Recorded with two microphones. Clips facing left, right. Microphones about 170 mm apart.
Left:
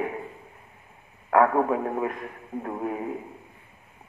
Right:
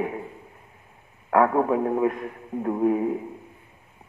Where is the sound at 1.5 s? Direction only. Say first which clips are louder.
Right 2 dB; 15° right (ahead or behind).